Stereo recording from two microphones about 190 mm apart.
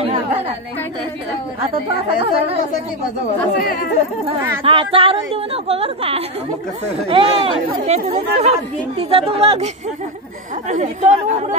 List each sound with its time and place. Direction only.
3.5 s speech: 50° left (ahead or behind)
4.6 s speech: 30° right (ahead or behind)
10.7 s speech: 40° right (ahead or behind)